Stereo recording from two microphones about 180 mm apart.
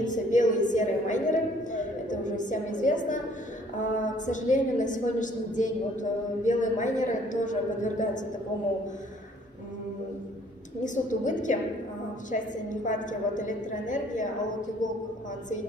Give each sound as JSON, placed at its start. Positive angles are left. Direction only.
{"t": 0.0, "sound": "a woman's voice", "side_deg": 45}
{"t": 10.8, "sound": "a woman's voice", "side_deg": 45}
{"t": 12.8, "sound": "a woman's voice", "side_deg": 45}